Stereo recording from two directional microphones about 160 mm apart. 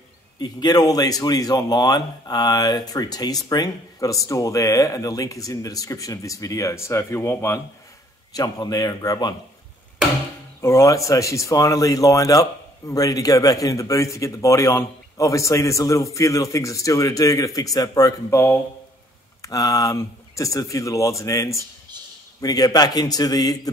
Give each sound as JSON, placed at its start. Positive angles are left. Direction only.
{"t": 0.4, "sound": "a man's voice", "side_deg": 25}
{"t": 10.6, "sound": "a man's voice", "side_deg": 20}